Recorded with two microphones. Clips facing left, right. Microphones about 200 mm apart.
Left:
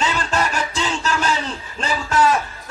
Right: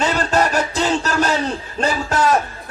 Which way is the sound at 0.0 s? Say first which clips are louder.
Right 4 dB; 40° right (ahead or behind).